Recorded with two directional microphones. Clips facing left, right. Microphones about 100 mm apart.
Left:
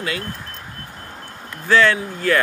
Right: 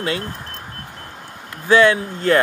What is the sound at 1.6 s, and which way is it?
Speech, 20° right (ahead or behind).